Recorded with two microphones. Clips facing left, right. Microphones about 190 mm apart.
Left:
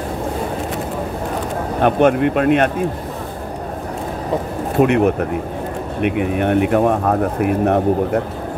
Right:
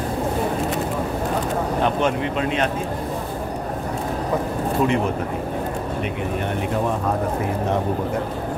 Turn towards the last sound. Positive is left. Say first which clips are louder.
# left 6 dB
turn(degrees=65)  # may be behind; listen again after turning